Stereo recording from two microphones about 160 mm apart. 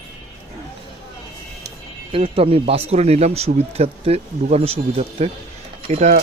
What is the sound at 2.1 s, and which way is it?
Speech, 35° right (ahead or behind).